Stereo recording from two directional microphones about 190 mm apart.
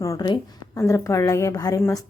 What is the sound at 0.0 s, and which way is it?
A woman's voice, 20° left (ahead or behind).